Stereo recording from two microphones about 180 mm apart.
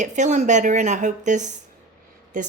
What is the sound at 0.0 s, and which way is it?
Speech, 40° right (ahead or behind).